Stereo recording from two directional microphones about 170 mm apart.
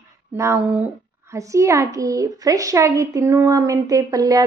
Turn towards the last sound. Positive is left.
turn(degrees=-20)  # may be behind; listen again after turning